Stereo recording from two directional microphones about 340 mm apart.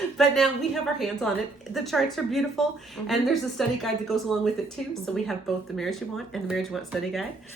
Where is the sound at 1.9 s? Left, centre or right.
Centre.